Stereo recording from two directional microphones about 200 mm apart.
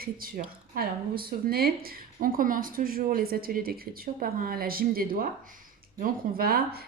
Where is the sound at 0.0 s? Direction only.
45° right (ahead or behind).